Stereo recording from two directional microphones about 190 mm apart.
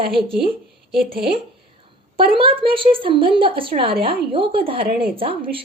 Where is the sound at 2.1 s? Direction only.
30° right (ahead or behind).